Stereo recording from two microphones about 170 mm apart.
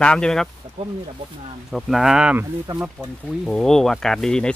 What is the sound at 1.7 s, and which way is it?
Speech, centre (ahead or behind).